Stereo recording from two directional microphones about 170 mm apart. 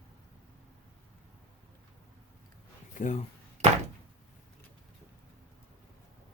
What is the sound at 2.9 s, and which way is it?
Speech, 45° left (ahead or behind).